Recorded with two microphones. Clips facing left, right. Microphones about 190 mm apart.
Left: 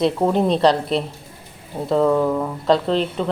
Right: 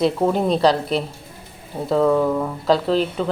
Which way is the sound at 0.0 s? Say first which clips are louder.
Left 1 dB; centre (ahead or behind).